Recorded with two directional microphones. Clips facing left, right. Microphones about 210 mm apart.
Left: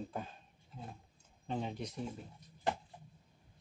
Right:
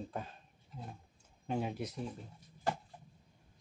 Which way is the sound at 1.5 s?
10° right (ahead or behind).